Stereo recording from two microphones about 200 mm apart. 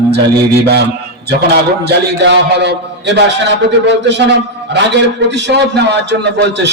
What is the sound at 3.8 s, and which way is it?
A man's voice, 60° right (ahead or behind).